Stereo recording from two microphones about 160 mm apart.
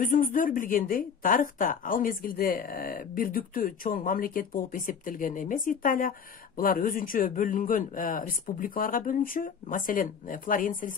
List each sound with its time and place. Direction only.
0.0 s speech: 55° left (ahead or behind)